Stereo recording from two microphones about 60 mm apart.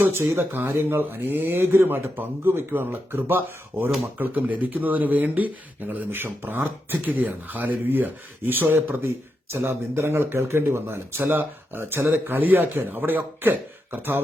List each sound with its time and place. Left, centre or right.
0.0 s speech: right